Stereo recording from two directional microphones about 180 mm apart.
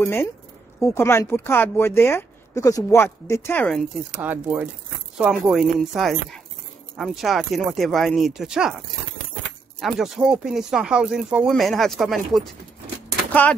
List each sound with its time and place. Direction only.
0.0 s a woman's voice: 15° left (ahead or behind)
4.2 s speech: 10° right (ahead or behind)
9.8 s speech: centre (ahead or behind)